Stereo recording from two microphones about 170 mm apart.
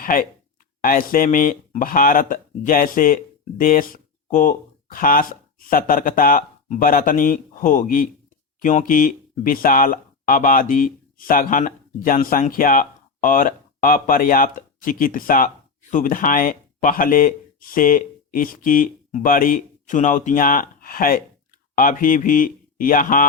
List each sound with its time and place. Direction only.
0.0 s speech: 55° left (ahead or behind)